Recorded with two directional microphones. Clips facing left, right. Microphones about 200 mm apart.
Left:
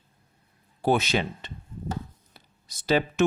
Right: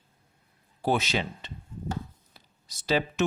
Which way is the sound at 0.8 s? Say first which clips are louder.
Left 3 dB; 55° left (ahead or behind).